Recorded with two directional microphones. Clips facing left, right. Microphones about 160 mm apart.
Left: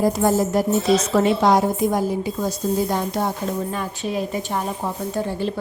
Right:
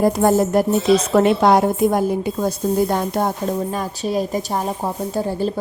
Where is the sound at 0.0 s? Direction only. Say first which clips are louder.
Right 3 dB; 55° right (ahead or behind).